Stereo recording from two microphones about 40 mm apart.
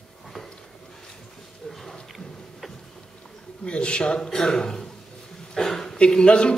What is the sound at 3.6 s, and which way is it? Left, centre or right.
A man's voice, left.